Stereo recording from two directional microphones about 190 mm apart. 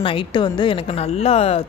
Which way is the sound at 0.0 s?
25° left (ahead or behind).